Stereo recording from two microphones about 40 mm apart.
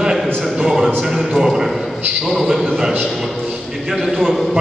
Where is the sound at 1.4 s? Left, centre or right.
Centre.